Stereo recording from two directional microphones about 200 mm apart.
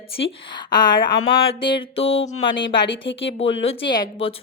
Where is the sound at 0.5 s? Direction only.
20° left (ahead or behind).